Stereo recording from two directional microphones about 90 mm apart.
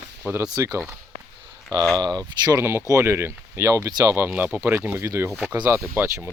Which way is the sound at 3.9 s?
45° right (ahead or behind).